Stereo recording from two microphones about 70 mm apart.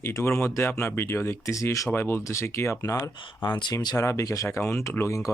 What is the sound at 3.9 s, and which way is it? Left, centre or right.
Speech, left.